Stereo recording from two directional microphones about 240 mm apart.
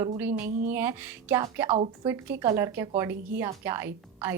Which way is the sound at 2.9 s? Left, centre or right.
Centre.